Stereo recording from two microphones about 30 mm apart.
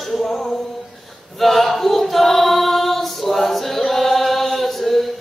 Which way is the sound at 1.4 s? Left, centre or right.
Centre.